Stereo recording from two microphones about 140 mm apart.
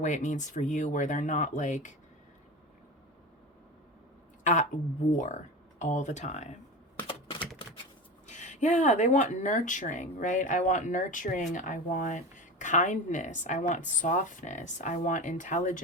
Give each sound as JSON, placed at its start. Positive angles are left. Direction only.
{"t": 0.0, "sound": "speech", "side_deg": 60}
{"t": 5.1, "sound": "speech", "side_deg": 60}
{"t": 7.1, "sound": "typing", "side_deg": 40}
{"t": 8.3, "sound": "speech", "side_deg": 60}